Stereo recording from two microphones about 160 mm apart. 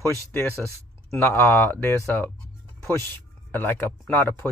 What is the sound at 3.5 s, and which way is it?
Speech, 10° left (ahead or behind).